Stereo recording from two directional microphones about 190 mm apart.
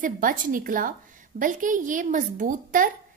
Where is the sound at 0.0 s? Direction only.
45° right (ahead or behind).